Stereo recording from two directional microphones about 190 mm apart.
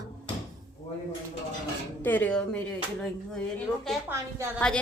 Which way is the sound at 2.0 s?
10° left (ahead or behind).